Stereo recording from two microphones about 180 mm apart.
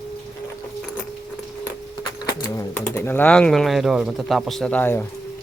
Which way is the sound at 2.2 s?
20° left (ahead or behind).